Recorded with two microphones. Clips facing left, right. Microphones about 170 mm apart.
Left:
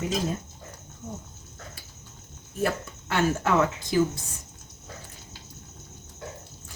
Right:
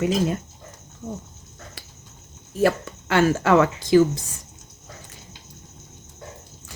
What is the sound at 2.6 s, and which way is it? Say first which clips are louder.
Speech: right 7 dB; 90° right.